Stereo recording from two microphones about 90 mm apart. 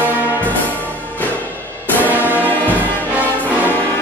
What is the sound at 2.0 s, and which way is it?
Music, 20° right (ahead or behind).